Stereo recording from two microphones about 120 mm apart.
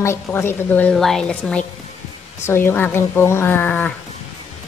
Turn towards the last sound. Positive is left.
turn(degrees=15)  # may be behind; listen again after turning